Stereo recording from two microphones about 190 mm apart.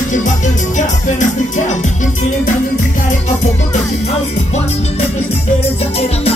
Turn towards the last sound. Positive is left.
turn(degrees=35)  # may be behind; listen again after turning